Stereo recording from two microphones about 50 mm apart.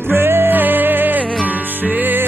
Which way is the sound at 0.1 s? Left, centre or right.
Right.